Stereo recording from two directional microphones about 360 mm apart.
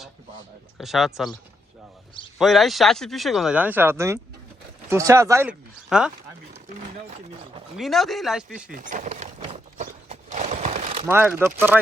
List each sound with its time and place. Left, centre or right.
0.8 s speech: centre
2.4 s speech: centre
7.8 s speech: centre
8.7 s a sound: right
11.0 s speech: centre